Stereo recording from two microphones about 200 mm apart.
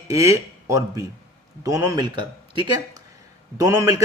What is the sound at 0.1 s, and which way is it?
A man's voice, 15° right (ahead or behind).